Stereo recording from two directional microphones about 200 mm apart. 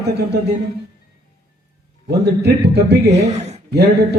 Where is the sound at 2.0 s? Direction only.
55° right (ahead or behind).